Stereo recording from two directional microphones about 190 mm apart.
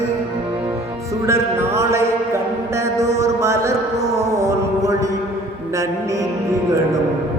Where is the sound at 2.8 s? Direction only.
15° right (ahead or behind).